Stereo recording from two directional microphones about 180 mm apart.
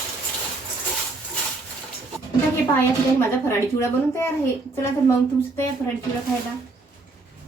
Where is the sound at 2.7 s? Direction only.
10° left (ahead or behind).